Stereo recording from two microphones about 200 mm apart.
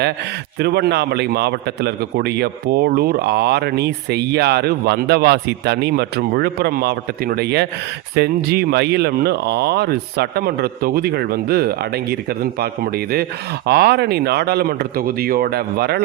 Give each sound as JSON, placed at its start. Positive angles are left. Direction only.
{"t": 0.6, "sound": "a man's voice", "side_deg": -55}